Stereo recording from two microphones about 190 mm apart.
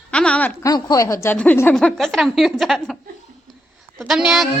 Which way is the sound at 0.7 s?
20° left (ahead or behind).